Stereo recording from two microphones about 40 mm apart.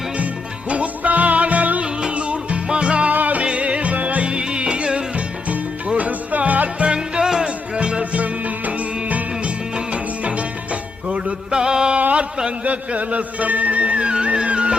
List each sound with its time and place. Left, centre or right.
0.7 s music: right
1.8 s music: right
3.1 s music: right
3.4 s music: right
5.5 s music: right
6.9 s music: right
8.2 s music: right
11.5 s music: centre